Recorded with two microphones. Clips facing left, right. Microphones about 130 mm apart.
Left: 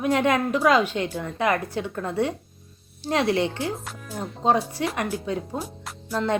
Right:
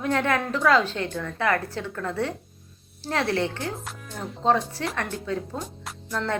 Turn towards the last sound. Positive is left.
turn(degrees=15)  # may be behind; listen again after turning